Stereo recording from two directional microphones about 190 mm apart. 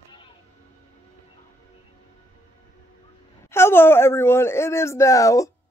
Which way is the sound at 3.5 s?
10° left (ahead or behind).